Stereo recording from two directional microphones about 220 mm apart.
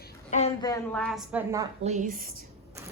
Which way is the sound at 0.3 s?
30° left (ahead or behind).